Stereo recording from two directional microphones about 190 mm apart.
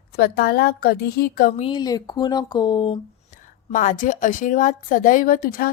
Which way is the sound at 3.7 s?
45° left (ahead or behind).